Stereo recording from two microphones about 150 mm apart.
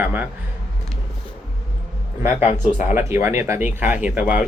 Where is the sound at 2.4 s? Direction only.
50° left (ahead or behind).